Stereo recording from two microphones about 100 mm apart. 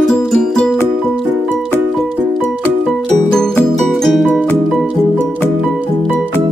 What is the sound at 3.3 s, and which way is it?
Music, 5° left (ahead or behind).